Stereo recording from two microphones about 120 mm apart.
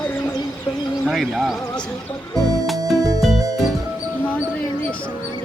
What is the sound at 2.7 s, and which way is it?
Music, 30° right (ahead or behind).